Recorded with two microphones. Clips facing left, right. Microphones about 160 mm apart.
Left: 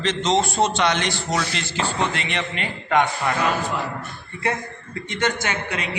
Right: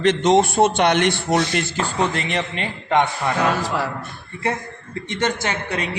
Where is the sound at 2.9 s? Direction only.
25° right (ahead or behind).